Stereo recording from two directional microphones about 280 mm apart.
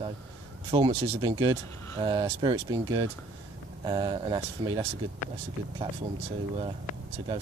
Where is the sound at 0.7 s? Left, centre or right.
Centre.